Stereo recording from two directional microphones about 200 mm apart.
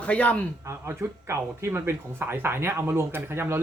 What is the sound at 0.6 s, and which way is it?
Speech, 15° right (ahead or behind).